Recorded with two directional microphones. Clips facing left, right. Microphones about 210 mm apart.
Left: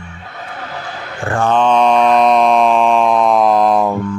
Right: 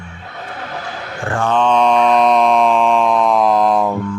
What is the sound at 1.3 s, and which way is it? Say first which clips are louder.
Mantra: left 2 dB; 40° left (ahead or behind).